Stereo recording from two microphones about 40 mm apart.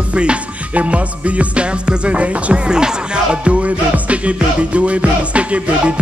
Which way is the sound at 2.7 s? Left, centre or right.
Centre.